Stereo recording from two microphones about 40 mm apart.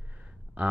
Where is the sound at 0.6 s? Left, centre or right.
Right.